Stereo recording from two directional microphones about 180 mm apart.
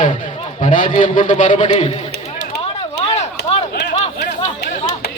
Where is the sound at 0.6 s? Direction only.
45° left (ahead or behind).